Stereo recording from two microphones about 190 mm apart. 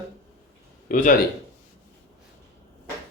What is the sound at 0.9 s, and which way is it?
Speech, 45° left (ahead or behind).